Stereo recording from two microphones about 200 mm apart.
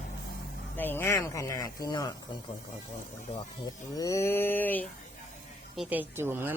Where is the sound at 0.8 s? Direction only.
10° left (ahead or behind).